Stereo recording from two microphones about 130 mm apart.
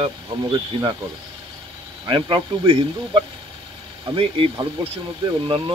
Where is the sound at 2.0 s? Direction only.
40° right (ahead or behind).